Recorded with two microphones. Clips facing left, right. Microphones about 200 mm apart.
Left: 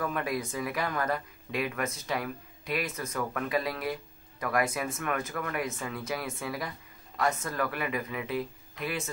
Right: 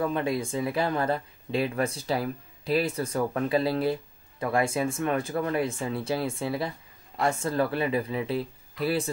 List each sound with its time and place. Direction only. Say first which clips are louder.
0.0 s speech: right 5 dB; 25° right (ahead or behind)